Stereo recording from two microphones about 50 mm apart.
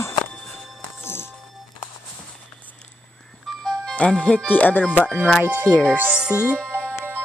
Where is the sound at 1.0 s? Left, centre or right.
Left.